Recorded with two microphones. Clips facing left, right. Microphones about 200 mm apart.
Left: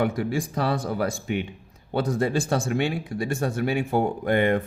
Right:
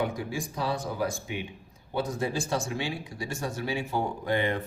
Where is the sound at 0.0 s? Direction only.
70° left (ahead or behind).